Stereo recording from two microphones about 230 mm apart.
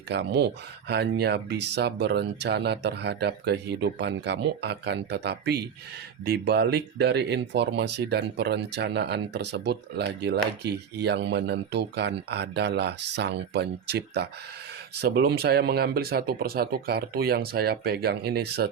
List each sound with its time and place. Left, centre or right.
0.1 s speech: right